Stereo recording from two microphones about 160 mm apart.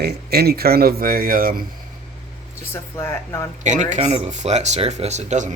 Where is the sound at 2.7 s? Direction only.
15° left (ahead or behind).